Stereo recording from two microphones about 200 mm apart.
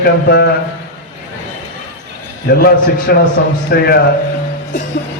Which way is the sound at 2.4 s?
50° left (ahead or behind).